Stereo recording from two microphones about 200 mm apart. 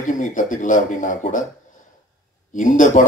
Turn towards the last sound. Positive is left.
turn(degrees=40)  # may be behind; listen again after turning